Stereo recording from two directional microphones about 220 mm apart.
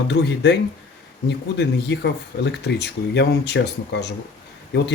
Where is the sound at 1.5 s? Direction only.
50° left (ahead or behind).